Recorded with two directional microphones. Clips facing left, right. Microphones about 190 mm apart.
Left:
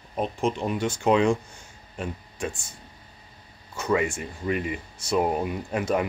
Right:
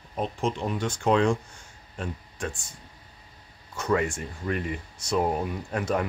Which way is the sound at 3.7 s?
5° left (ahead or behind).